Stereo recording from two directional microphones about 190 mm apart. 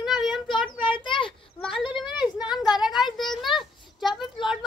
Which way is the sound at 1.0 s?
25° left (ahead or behind).